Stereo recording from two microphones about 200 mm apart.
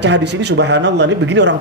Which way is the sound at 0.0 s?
60° right (ahead or behind).